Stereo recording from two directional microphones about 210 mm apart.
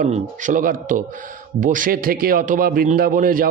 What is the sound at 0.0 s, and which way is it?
Speech, 40° right (ahead or behind).